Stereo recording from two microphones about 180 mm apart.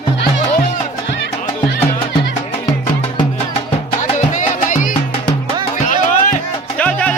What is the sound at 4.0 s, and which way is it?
Music, 40° left (ahead or behind).